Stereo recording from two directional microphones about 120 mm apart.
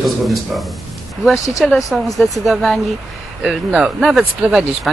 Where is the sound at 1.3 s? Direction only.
25° left (ahead or behind).